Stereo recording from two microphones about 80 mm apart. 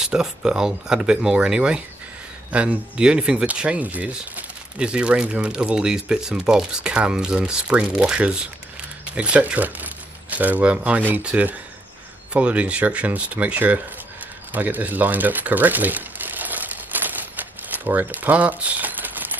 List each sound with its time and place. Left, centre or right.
0.0 s speech: centre
14.5 s crumpling: right